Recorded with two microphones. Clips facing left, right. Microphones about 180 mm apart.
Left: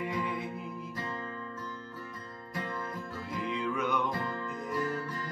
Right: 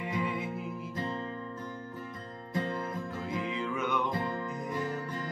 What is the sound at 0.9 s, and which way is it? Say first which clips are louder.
Music: right 5 dB; 25° right (ahead or behind).